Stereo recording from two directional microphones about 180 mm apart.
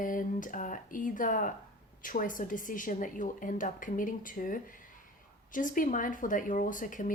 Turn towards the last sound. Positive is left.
turn(degrees=50)  # may be behind; listen again after turning